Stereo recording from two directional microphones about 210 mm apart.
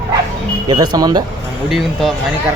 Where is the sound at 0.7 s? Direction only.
20° right (ahead or behind).